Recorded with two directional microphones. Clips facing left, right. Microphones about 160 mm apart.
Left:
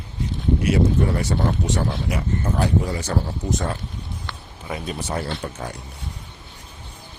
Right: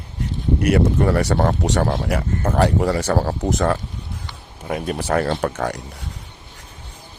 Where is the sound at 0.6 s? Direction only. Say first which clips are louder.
Right 3 dB; 65° right (ahead or behind); by 3.7 s 90° right.